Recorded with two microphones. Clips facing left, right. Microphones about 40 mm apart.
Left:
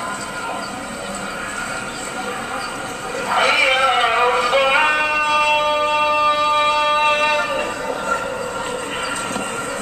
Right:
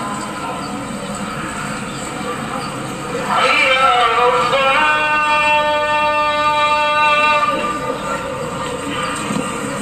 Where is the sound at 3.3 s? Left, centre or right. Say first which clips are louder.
Right 2 dB; right.